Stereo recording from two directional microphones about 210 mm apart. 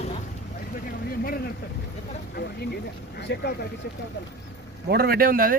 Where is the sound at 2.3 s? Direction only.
50° left (ahead or behind).